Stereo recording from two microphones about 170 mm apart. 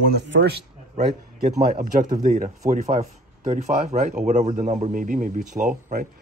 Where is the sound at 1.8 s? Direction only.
50° right (ahead or behind).